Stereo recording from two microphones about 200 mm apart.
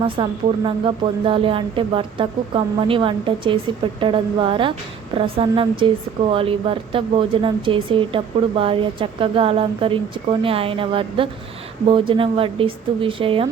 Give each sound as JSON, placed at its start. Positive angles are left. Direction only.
{"t": 0.0, "sound": "speech", "side_deg": -25}